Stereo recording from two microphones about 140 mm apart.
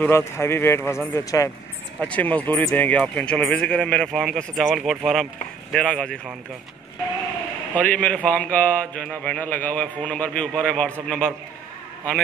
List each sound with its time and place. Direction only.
0.0 s speech: 20° left (ahead or behind)
2.0 s speech: 10° left (ahead or behind)
7.7 s speech: 10° left (ahead or behind)